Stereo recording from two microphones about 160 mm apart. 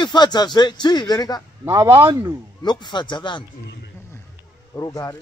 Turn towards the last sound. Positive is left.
turn(degrees=20)  # may be behind; listen again after turning